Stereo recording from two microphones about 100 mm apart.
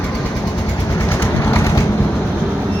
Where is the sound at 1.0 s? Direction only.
25° left (ahead or behind).